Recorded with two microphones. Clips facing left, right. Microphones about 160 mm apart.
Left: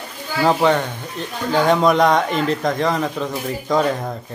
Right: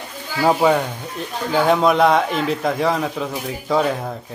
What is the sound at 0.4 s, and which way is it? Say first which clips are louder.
A man's voice: even; 10° right (ahead or behind).